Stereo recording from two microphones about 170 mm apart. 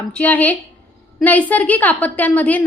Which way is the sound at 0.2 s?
10° left (ahead or behind).